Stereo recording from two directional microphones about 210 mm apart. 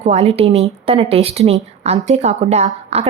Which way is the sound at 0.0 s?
30° right (ahead or behind).